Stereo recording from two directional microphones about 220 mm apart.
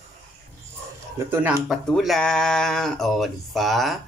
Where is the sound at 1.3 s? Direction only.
10° right (ahead or behind).